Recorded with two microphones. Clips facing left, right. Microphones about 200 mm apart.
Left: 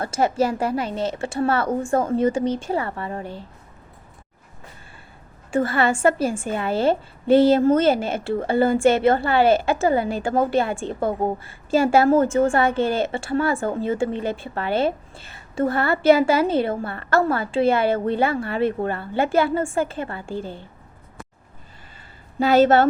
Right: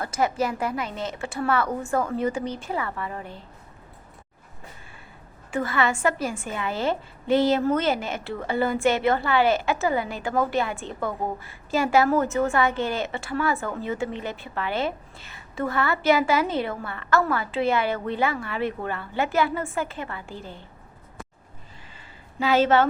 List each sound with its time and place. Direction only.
0.0 s a woman's voice: 30° left (ahead or behind)
5.5 s a woman's voice: 30° left (ahead or behind)
22.4 s a woman's voice: 40° left (ahead or behind)